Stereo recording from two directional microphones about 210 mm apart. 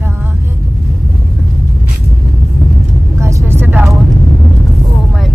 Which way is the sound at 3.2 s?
15° right (ahead or behind).